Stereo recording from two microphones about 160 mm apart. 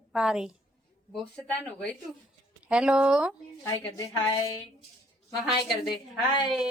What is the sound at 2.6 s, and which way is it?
Speech, 5° right (ahead or behind).